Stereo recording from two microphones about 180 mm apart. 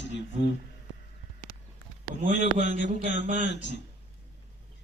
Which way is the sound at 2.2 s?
75° left (ahead or behind).